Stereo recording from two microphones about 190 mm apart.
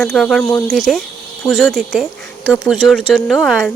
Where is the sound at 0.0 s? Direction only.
Centre (ahead or behind).